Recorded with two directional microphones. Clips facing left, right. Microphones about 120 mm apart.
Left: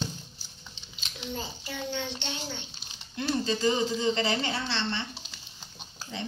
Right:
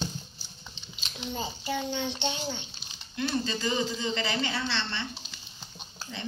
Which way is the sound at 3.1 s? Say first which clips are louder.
Left 1 dB; 30° left (ahead or behind).